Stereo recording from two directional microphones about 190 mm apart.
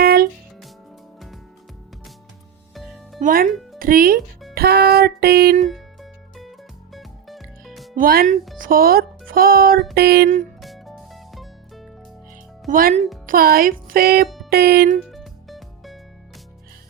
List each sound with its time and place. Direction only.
0.0 s music: 55° right (ahead or behind)
2.7 s music: centre (ahead or behind)
3.2 s speech: 40° right (ahead or behind)
3.5 s music: centre (ahead or behind)
3.8 s speech: 50° right (ahead or behind)
4.5 s music: 55° right (ahead or behind)
5.6 s music: centre (ahead or behind)
7.9 s speech: 50° right (ahead or behind)
9.9 s music: 55° right (ahead or behind)
10.6 s music: centre (ahead or behind)
12.6 s speech: 45° right (ahead or behind)
14.5 s music: 55° right (ahead or behind)
15.1 s music: centre (ahead or behind)